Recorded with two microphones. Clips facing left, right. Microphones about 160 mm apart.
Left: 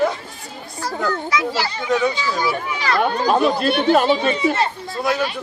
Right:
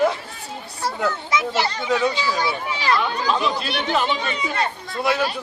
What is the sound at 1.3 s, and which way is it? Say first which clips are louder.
A child's voice: even; 25° right (ahead or behind).